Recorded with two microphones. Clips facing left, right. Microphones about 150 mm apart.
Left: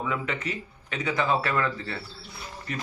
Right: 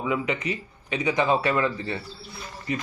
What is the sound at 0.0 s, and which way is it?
Speech, 10° right (ahead or behind).